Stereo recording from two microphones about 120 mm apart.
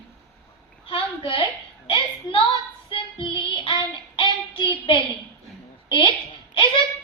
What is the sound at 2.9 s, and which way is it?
Child singing, 45° left (ahead or behind).